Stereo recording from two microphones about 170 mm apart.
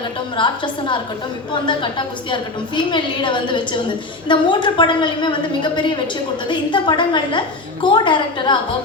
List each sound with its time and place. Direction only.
0.3 s a woman's voice: 30° left (ahead or behind)